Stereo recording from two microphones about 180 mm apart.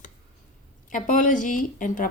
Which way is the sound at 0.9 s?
45° left (ahead or behind).